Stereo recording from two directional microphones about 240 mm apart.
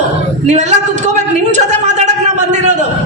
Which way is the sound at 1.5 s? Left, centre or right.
Right.